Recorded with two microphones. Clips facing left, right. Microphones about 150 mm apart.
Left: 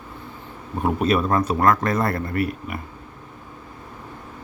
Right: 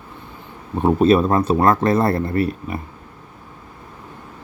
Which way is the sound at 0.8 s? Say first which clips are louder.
Right 6 dB; 30° right (ahead or behind).